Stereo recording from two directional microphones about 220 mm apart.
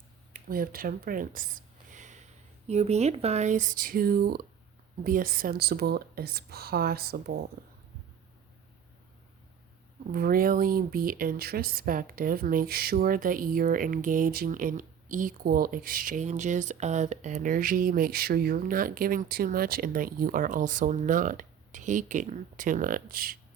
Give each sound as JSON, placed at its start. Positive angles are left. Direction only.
{"t": 0.3, "sound": "a sound", "side_deg": -40}
{"t": 2.6, "sound": "speech", "side_deg": -30}
{"t": 10.1, "sound": "speech", "side_deg": -45}